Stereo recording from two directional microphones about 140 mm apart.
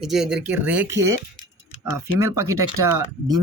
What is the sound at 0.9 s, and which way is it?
Speech, 20° right (ahead or behind).